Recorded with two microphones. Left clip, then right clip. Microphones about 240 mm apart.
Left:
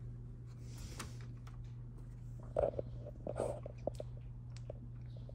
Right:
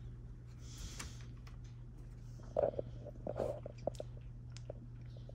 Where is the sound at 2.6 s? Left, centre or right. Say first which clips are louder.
Right 1 dB; left.